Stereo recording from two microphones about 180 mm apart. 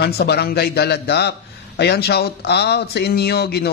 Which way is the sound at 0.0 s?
60° left (ahead or behind).